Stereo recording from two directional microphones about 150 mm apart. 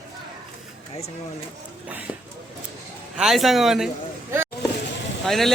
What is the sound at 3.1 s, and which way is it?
Speech, centre (ahead or behind).